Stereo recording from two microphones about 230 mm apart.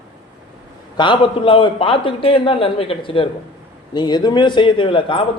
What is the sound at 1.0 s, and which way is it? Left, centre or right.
A man's voice, left.